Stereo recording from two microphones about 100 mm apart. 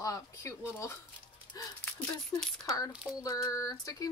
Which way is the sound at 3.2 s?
35° left (ahead or behind).